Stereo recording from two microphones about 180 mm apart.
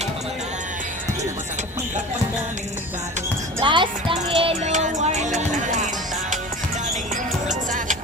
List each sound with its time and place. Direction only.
3.6 s music: 25° right (ahead or behind); by 5.9 s 45° right (ahead or behind)
7.4 s music: 45° right (ahead or behind)